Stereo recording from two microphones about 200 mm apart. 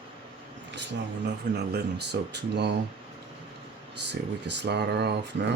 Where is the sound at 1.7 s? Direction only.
55° right (ahead or behind).